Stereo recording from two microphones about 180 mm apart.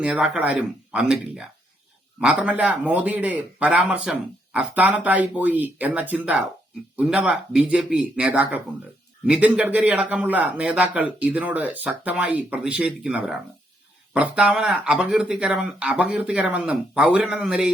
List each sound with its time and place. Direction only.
0.0 s speech: 5° right (ahead or behind)